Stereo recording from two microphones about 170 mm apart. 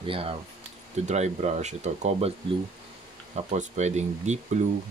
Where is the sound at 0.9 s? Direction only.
40° right (ahead or behind).